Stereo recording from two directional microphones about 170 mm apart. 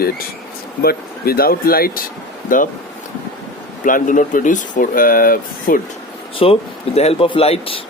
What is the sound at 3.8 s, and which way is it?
Speech, 50° left (ahead or behind).